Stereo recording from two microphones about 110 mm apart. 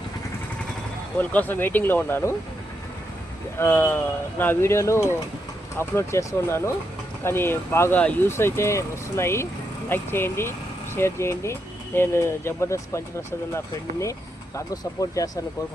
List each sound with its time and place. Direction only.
1.2 s speech: 15° left (ahead or behind)
3.6 s speech: 20° left (ahead or behind)
14.0 s speech: 30° left (ahead or behind)